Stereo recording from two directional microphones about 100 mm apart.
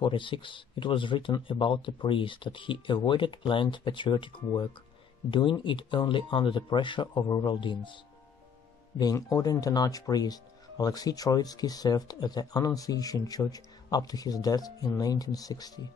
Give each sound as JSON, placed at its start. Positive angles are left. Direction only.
{"t": 0.0, "sound": "speech", "side_deg": 55}
{"t": 9.0, "sound": "speech", "side_deg": 35}